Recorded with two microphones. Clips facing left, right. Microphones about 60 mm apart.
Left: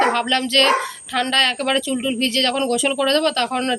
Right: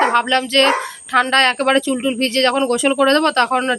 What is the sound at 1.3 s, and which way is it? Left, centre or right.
Speech, right.